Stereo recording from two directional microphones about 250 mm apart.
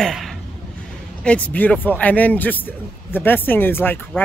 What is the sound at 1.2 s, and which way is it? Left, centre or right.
Speech, centre.